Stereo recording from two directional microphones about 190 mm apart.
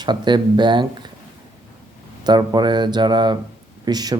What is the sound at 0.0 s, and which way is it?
Speech, 25° right (ahead or behind).